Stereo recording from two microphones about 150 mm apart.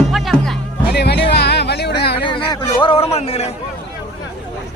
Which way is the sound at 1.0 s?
90° left.